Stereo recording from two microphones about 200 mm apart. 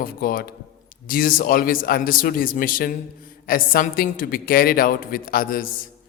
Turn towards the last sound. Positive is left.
turn(degrees=45)  # may be behind; listen again after turning